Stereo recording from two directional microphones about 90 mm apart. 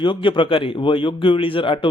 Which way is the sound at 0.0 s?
65° left (ahead or behind).